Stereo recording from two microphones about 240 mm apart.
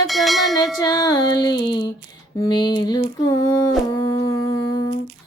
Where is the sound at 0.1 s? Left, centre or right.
Centre.